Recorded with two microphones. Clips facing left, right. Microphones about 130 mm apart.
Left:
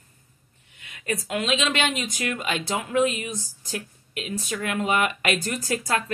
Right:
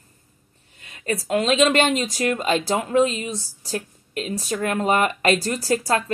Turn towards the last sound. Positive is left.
turn(degrees=-35)  # may be behind; listen again after turning